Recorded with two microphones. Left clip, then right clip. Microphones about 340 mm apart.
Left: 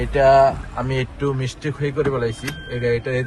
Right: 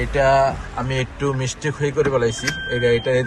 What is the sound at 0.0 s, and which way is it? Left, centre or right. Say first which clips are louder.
Speech: left 3 dB; centre.